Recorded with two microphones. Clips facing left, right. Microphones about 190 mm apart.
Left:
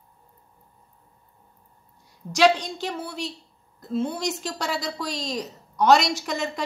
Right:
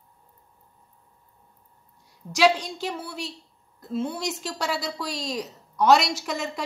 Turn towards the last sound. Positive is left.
turn(degrees=-5)  # may be behind; listen again after turning